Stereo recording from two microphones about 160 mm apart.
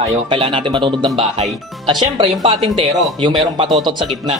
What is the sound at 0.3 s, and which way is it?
Speech, 30° right (ahead or behind).